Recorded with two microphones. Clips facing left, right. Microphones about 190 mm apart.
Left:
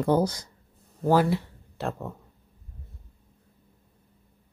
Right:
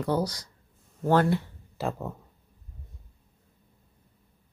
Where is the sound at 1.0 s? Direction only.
10° left (ahead or behind).